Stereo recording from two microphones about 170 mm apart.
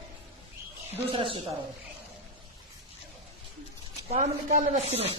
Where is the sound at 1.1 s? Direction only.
30° right (ahead or behind).